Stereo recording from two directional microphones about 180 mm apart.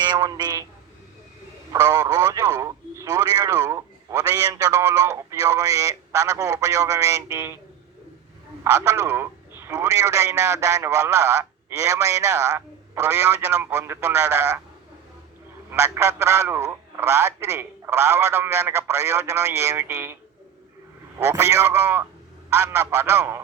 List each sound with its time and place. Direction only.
0.0 s speech: 25° right (ahead or behind)
1.7 s speech: 15° right (ahead or behind)
8.6 s speech: 15° right (ahead or behind)
15.7 s speech: 15° right (ahead or behind)
21.2 s speech: 15° right (ahead or behind)